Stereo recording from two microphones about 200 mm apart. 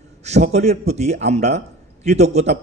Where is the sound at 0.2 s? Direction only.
35° right (ahead or behind).